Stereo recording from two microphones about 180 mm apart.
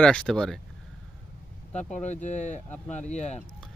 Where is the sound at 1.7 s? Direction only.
40° left (ahead or behind).